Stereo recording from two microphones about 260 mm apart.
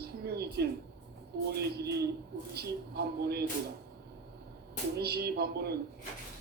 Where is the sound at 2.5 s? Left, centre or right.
Right.